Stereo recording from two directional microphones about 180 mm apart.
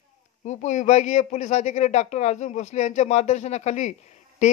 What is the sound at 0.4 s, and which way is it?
Speech, 40° left (ahead or behind).